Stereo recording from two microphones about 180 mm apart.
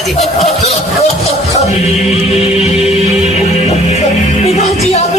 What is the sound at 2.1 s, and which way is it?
Music, 35° left (ahead or behind).